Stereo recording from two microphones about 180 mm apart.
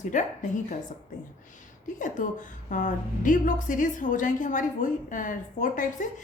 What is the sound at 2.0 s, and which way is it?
A woman's voice, 45° left (ahead or behind).